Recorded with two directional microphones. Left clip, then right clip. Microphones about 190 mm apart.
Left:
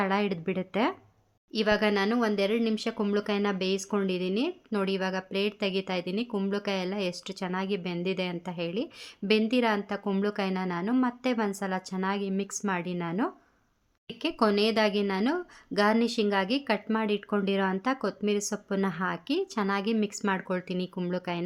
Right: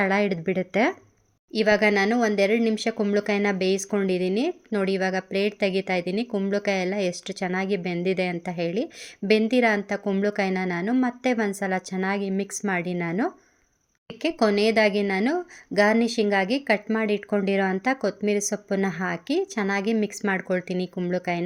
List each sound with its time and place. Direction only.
0.0 s a woman's voice: 20° right (ahead or behind)